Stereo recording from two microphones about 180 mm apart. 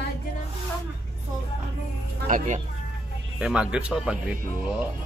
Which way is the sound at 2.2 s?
45° right (ahead or behind).